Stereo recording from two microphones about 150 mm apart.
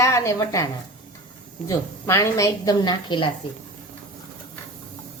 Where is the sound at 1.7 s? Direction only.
20° left (ahead or behind).